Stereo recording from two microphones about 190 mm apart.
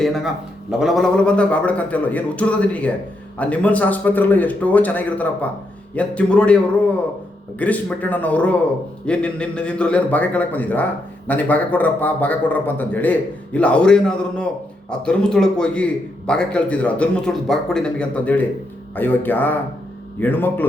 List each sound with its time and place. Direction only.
0.0 s a man's voice: centre (ahead or behind)